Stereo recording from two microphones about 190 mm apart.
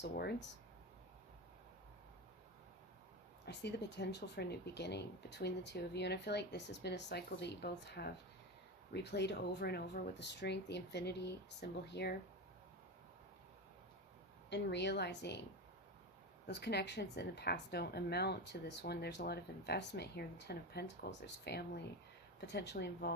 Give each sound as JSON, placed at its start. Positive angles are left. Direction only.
{"t": 0.0, "sound": "speech", "side_deg": 55}
{"t": 3.4, "sound": "speech", "side_deg": 60}
{"t": 14.5, "sound": "speech", "side_deg": 65}
{"t": 16.5, "sound": "speech", "side_deg": 60}